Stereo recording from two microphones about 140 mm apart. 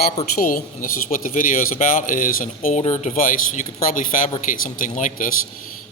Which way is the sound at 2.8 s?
60° left (ahead or behind).